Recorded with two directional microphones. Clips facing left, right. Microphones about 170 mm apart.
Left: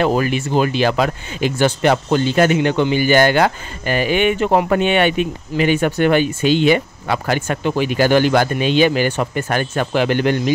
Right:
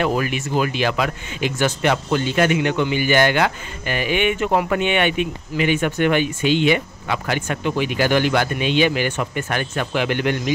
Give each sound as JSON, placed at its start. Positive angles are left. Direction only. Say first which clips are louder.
{"t": 0.0, "sound": "speech", "louder": "left 4 dB", "side_deg": 30}